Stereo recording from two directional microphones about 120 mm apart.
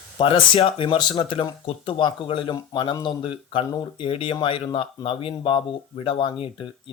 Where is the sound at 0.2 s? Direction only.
45° left (ahead or behind).